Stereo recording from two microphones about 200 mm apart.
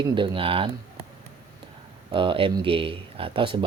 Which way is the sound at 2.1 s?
25° right (ahead or behind).